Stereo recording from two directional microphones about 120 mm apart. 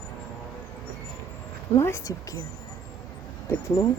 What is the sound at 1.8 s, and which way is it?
Speech, 20° left (ahead or behind).